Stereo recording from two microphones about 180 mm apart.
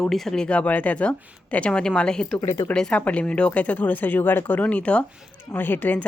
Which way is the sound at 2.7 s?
5° left (ahead or behind).